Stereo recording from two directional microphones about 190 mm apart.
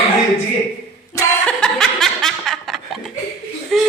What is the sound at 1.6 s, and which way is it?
Snicker, centre (ahead or behind).